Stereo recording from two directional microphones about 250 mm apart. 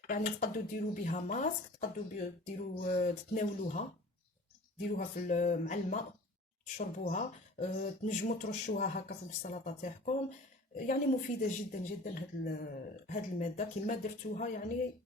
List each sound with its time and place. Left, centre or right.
0.1 s speech: left
4.9 s speech: left